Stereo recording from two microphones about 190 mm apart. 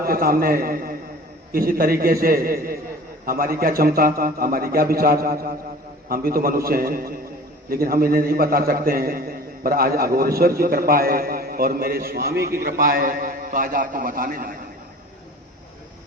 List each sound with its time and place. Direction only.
0.0 s a man's voice: 50° right (ahead or behind)